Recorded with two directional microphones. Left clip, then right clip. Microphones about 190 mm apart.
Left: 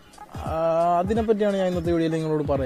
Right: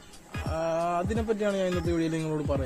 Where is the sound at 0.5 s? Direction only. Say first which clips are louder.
Left 7 dB; 20° left (ahead or behind).